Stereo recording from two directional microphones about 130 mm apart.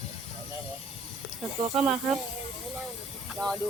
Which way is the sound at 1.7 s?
5° right (ahead or behind).